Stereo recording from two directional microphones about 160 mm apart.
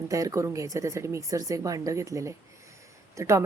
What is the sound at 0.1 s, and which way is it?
Speech, 20° right (ahead or behind).